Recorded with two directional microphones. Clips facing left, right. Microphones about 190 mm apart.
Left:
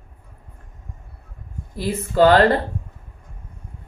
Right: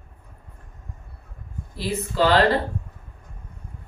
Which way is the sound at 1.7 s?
50° left (ahead or behind).